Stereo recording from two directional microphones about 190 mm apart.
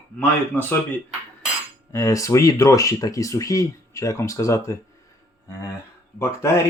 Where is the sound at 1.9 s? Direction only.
15° left (ahead or behind).